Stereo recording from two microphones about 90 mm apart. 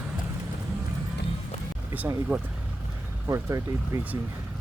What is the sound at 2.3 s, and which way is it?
Speech, 15° right (ahead or behind).